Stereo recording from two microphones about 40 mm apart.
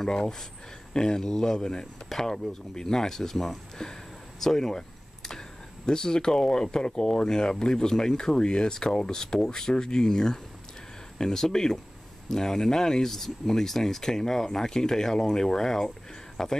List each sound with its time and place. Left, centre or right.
0.9 s speech: centre
3.8 s a sound: centre
5.9 s speech: centre